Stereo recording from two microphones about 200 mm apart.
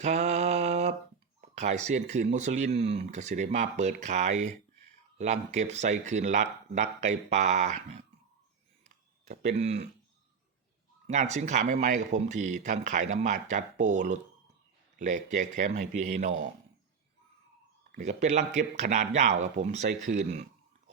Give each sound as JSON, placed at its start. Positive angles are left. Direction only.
{"t": 0.0, "sound": "mantra", "side_deg": -35}
{"t": 1.4, "sound": "a sound", "side_deg": -35}
{"t": 1.9, "sound": "speech", "side_deg": -35}
{"t": 9.2, "sound": "a sound", "side_deg": -35}
{"t": 9.6, "sound": "speech", "side_deg": -35}
{"t": 11.0, "sound": "speech", "side_deg": -35}
{"t": 17.9, "sound": "speech", "side_deg": -35}